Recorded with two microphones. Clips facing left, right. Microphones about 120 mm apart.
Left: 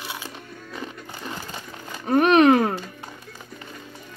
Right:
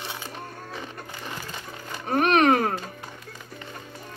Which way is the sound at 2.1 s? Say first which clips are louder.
Left 4 dB; centre (ahead or behind).